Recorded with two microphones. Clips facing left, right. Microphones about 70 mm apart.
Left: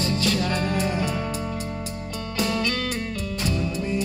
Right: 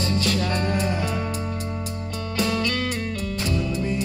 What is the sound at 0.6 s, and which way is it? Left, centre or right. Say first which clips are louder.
Music: even; right.